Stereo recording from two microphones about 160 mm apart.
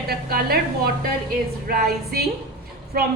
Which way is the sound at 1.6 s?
75° right (ahead or behind).